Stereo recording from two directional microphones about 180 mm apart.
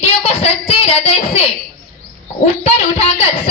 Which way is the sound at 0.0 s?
30° left (ahead or behind).